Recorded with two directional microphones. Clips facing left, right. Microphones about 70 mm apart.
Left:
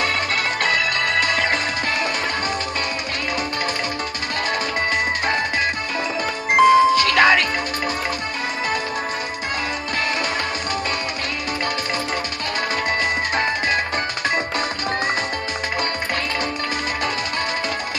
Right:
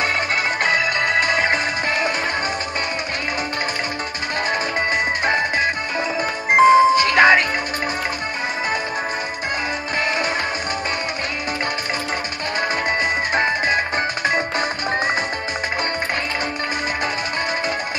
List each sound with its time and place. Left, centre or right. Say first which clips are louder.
0.7 s music: right 1 dB; right
6.5 s music: right 1 dB; right
13.3 s music: right 2 dB; right